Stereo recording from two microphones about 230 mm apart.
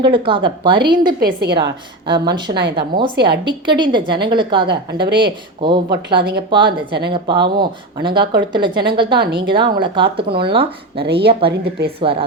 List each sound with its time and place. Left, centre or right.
0.0 s a woman's voice: right
1.2 s a woman's voice: right
1.5 s a woman's voice: centre